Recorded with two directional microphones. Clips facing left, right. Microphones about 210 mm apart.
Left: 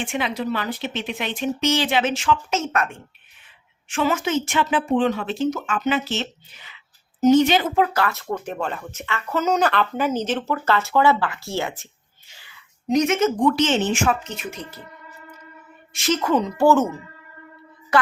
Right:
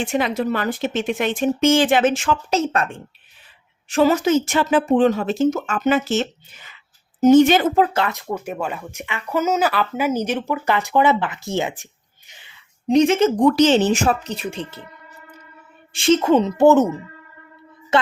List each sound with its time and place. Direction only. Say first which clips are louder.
0.0 s speech: right 4 dB; 40° right (ahead or behind)
7.8 s speech: right 2 dB; 20° right (ahead or behind)
15.9 s a woman's voice: right 6 dB; 30° right (ahead or behind)
17.9 s a woman's voice: right 1 dB; 25° right (ahead or behind)